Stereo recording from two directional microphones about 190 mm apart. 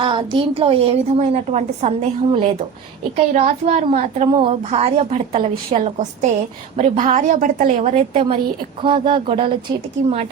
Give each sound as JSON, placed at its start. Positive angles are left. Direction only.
{"t": 0.0, "sound": "a woman's voice", "side_deg": -25}